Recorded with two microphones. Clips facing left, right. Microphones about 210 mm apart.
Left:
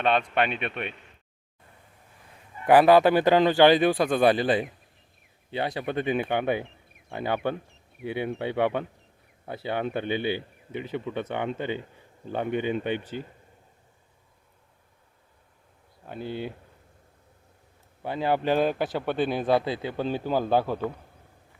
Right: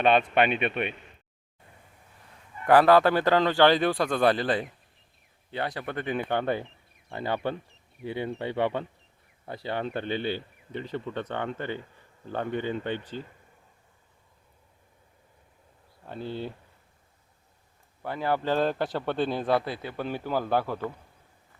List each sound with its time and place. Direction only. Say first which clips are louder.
0.0 s a man's voice: right 2 dB; 5° right (ahead or behind)
2.6 s speech: left 2 dB; 15° left (ahead or behind)
8.0 s speech: left 2 dB; 65° left (ahead or behind)
8.3 s speech: left 2 dB; 15° left (ahead or behind)
16.0 s speech: left 1 dB; 10° left (ahead or behind)
18.0 s a man's voice: left 2 dB; 20° left (ahead or behind)